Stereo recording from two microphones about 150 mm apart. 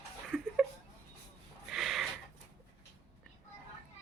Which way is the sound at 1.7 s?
Centre (ahead or behind).